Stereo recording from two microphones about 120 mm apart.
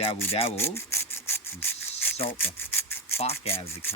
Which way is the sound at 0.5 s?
20° left (ahead or behind).